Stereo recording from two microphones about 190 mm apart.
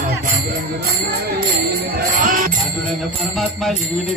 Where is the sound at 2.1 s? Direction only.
45° right (ahead or behind).